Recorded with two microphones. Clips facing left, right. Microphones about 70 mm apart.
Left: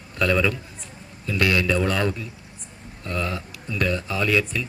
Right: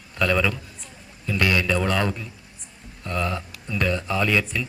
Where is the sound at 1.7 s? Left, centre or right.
Centre.